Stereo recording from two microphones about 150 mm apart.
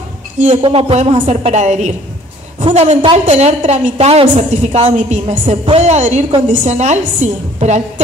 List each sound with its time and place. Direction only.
0.6 s speech: 40° right (ahead or behind)
1.2 s a woman's voice: 50° right (ahead or behind)